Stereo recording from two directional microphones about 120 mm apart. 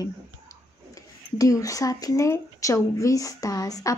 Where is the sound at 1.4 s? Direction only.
30° left (ahead or behind).